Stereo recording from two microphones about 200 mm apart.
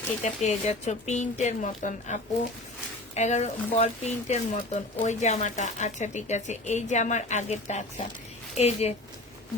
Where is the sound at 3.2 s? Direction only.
35° left (ahead or behind).